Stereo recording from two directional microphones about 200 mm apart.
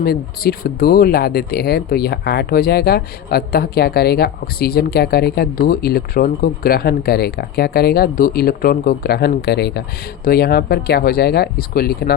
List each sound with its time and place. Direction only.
0.0 s speech: 50° left (ahead or behind)